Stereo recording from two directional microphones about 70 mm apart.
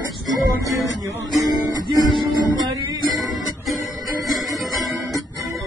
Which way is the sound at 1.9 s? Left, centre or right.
Right.